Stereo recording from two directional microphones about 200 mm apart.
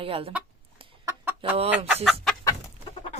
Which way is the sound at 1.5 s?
30° right (ahead or behind).